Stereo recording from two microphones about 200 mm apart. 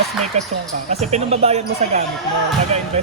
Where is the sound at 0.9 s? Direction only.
35° right (ahead or behind).